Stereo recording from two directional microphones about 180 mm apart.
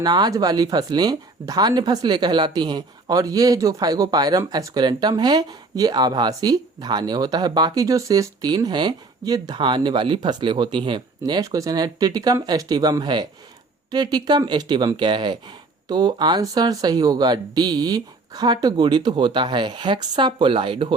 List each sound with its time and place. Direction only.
0.0 s speech: 20° right (ahead or behind)